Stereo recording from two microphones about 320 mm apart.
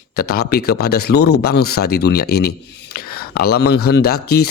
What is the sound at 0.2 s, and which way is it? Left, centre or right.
Speech, left.